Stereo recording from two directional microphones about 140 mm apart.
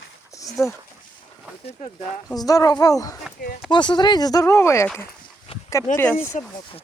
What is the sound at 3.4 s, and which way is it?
Speech, 90° left.